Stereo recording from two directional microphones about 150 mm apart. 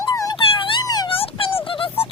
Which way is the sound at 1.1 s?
40° left (ahead or behind).